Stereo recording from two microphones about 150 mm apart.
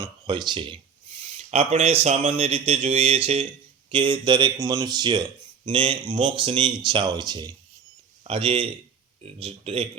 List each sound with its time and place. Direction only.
0.0 s speech: 30° right (ahead or behind)
1.4 s speech: 50° right (ahead or behind)